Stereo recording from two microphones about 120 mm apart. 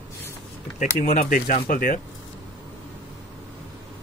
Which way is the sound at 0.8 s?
90° left.